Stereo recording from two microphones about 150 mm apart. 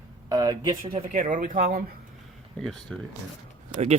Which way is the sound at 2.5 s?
5° left (ahead or behind).